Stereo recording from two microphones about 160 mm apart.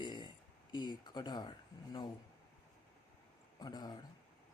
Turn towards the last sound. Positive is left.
turn(degrees=25)  # may be behind; listen again after turning